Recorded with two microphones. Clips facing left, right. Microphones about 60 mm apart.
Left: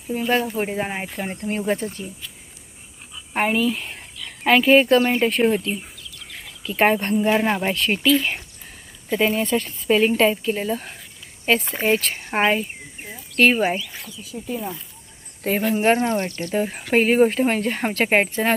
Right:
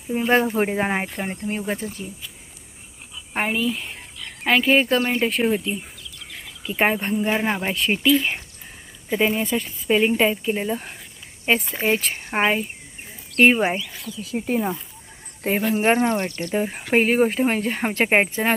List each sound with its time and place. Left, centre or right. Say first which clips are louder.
0.3 s speech: right 3 dB; right
1.0 s speech: even; centre
3.3 s speech: left 3 dB; centre
6.6 s speech: left 2 dB; centre
6.8 s speech: left 3 dB; centre
13.4 s speech: right 1 dB; centre
14.2 s speech: right 6 dB; right
15.8 s speech: even; centre
16.5 s speech: even; centre
17.9 s speech: right 1 dB; centre